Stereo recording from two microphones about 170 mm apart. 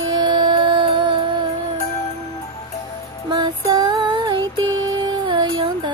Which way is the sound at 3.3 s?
25° right (ahead or behind).